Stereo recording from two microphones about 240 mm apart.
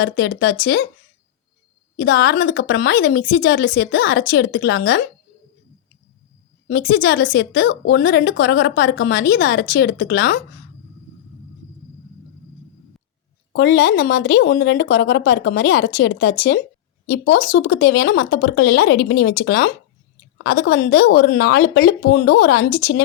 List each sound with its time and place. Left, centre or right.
0.0 s a woman's voice: left
2.0 s a woman's voice: left
6.7 s a woman's voice: left
13.5 s a woman's voice: left